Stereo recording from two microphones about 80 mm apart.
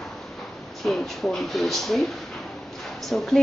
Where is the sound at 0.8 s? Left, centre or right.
Centre.